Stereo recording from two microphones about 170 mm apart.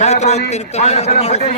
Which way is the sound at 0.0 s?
40° left (ahead or behind).